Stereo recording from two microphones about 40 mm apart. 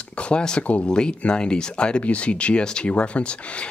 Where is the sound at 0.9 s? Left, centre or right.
Centre.